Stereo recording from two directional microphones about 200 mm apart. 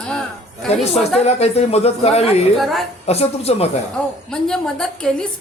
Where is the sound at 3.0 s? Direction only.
30° left (ahead or behind).